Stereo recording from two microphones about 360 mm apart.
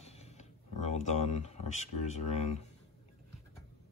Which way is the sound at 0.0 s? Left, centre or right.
Centre.